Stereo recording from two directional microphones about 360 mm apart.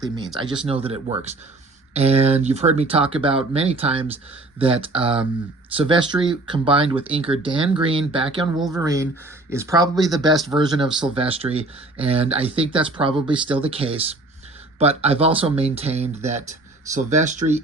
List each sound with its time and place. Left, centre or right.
0.6 s speech: centre